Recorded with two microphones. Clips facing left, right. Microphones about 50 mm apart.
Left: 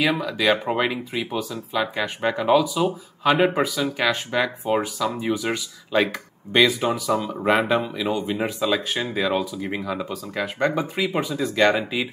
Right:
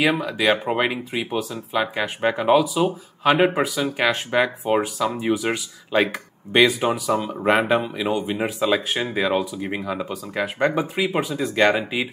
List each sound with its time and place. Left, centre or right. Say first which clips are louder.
0.1 s speech: right 1 dB; centre